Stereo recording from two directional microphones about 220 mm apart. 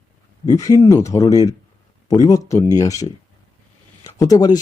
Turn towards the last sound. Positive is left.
turn(degrees=15)  # may be behind; listen again after turning